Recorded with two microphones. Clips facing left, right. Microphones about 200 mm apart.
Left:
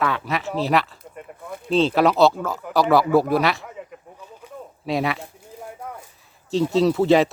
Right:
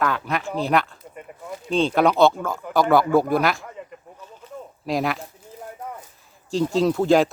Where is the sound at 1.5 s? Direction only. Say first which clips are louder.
Right 1 dB; 55° left (ahead or behind).